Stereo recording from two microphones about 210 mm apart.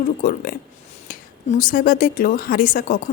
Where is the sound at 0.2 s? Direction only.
40° left (ahead or behind).